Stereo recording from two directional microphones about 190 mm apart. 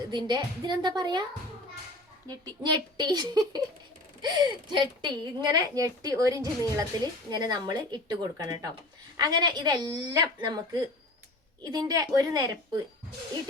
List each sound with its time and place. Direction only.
0.1 s a woman's voice: 25° right (ahead or behind)
2.2 s a woman's voice: 20° right (ahead or behind)